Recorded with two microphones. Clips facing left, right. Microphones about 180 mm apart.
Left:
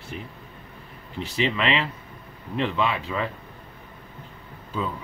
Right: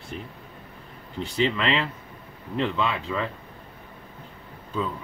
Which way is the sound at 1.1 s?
70° left (ahead or behind).